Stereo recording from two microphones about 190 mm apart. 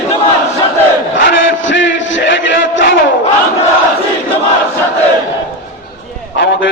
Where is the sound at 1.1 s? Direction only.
75° left (ahead or behind).